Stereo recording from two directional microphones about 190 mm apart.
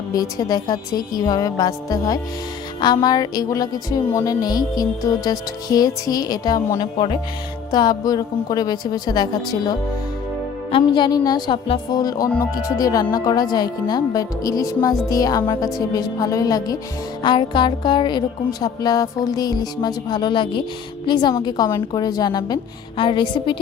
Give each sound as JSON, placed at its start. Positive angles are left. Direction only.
{"t": 0.1, "sound": "speech", "side_deg": 20}